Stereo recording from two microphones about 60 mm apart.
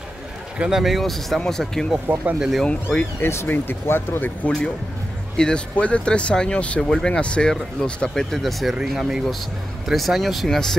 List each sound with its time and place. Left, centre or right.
0.6 s speech: centre
2.1 s speech: right
2.6 s speech: centre
3.0 s speech: left
4.4 s speech: left
8.2 s speech: centre